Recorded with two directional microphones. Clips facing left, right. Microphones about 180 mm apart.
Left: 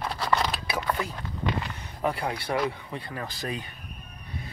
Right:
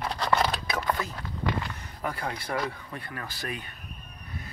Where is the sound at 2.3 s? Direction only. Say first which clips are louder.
Left 4 dB; 25° left (ahead or behind).